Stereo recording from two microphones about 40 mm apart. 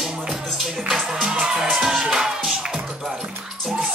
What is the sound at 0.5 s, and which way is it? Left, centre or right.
Music, centre.